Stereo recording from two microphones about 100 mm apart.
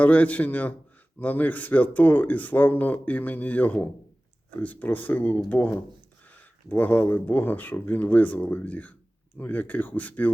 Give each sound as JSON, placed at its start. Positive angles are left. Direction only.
{"t": 0.0, "sound": "speech", "side_deg": 15}